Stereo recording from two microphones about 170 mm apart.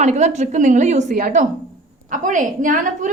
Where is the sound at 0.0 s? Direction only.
45° right (ahead or behind).